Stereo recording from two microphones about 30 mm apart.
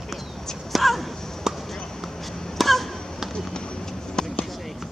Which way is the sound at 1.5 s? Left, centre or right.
Centre.